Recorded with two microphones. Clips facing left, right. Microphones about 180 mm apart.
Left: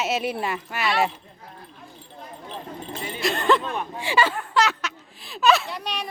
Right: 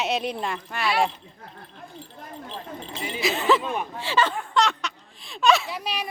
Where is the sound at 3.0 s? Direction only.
Centre (ahead or behind).